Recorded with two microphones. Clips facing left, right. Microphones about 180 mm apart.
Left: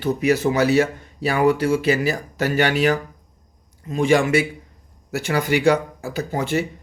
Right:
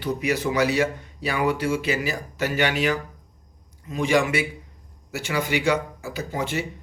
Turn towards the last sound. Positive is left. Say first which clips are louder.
# left 4 dB
turn(degrees=45)  # may be behind; listen again after turning